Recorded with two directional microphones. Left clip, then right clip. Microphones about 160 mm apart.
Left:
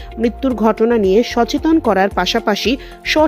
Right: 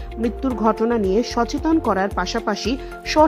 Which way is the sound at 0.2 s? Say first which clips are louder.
Left 6 dB; 20° left (ahead or behind).